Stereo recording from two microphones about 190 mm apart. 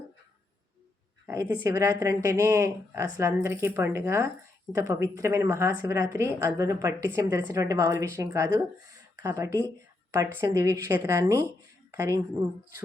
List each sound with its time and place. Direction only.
1.3 s a woman's voice: 15° right (ahead or behind)